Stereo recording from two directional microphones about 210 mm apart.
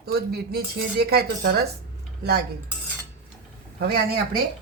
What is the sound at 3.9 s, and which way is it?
Speech, 45° right (ahead or behind).